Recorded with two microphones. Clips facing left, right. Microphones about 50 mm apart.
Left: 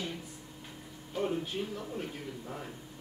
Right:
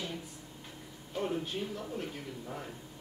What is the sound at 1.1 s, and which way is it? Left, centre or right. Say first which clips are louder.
A woman's voice: left 1 dB; centre.